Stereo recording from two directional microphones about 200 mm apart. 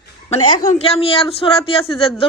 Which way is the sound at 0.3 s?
35° left (ahead or behind).